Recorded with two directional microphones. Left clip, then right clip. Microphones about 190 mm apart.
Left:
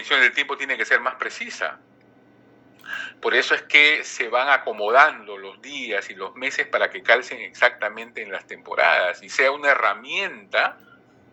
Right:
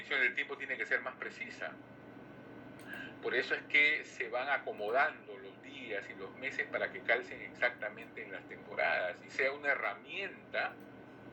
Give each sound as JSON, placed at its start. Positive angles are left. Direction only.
{"t": 0.0, "sound": "a man's voice", "side_deg": 55}
{"t": 2.9, "sound": "a man's voice", "side_deg": 50}